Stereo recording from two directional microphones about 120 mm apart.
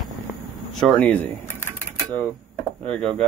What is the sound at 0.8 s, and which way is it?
Speech, 10° left (ahead or behind).